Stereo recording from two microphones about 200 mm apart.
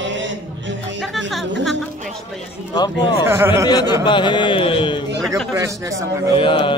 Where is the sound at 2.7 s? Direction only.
20° left (ahead or behind).